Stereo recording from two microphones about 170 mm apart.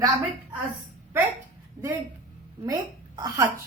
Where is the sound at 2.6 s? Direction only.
20° right (ahead or behind).